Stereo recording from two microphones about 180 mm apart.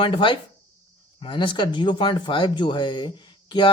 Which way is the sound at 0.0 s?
25° left (ahead or behind).